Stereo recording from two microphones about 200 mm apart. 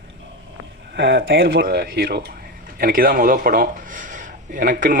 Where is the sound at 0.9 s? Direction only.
65° right (ahead or behind).